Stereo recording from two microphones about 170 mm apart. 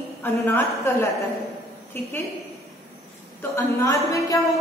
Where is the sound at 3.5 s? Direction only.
15° left (ahead or behind).